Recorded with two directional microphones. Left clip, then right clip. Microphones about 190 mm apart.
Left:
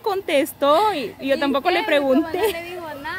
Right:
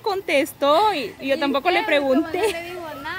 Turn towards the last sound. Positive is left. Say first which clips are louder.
# left 1 dB
turn(degrees=20)  # may be behind; listen again after turning